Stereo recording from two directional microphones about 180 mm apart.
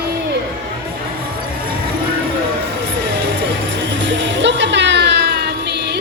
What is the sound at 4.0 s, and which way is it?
Music, 85° right.